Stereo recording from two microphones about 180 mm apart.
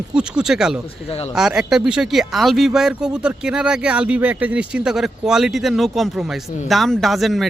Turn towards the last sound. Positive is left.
turn(degrees=0)  # may be behind; listen again after turning